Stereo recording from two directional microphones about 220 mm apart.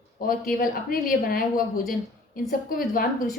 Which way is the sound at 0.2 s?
40° left (ahead or behind).